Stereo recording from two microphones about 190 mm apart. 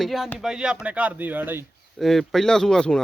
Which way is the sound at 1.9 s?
Centre (ahead or behind).